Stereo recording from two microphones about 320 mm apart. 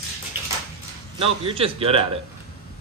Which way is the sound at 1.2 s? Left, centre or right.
Centre.